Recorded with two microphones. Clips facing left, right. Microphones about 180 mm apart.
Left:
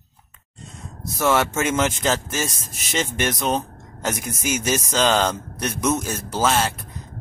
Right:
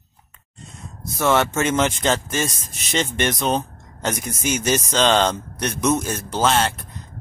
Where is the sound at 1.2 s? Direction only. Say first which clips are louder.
Right 1 dB; 5° left (ahead or behind).